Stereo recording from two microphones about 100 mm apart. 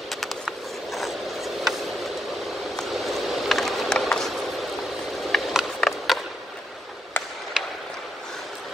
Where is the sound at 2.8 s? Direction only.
Centre (ahead or behind).